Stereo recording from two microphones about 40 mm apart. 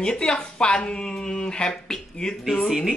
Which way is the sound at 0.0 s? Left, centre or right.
Left.